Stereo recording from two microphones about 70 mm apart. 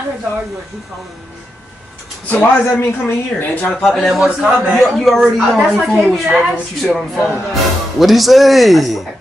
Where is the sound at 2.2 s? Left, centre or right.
Left.